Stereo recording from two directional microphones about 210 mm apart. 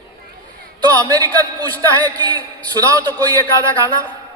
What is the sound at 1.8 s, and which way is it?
A man's voice, 20° right (ahead or behind).